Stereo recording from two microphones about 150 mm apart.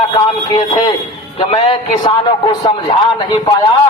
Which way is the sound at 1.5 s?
50° left (ahead or behind).